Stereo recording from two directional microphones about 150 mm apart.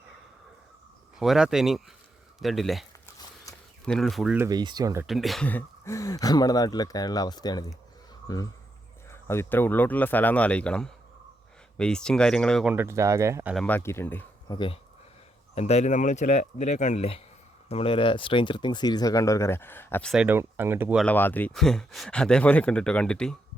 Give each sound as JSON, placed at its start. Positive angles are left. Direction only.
{"t": 1.2, "sound": "speech", "side_deg": -5}
{"t": 3.5, "sound": "a sound", "side_deg": 20}
{"t": 3.8, "sound": "speech", "side_deg": 5}
{"t": 4.4, "sound": "speech", "side_deg": -25}
{"t": 5.0, "sound": "speech", "side_deg": 0}
{"t": 5.5, "sound": "speech", "side_deg": 15}
{"t": 9.0, "sound": "speech", "side_deg": 15}
{"t": 12.6, "sound": "speech", "side_deg": -15}
{"t": 13.7, "sound": "speech", "side_deg": 15}
{"t": 14.5, "sound": "speech", "side_deg": 35}
{"t": 15.5, "sound": "speech", "side_deg": 45}
{"t": 20.2, "sound": "speech", "side_deg": -15}
{"t": 20.9, "sound": "speech", "side_deg": 10}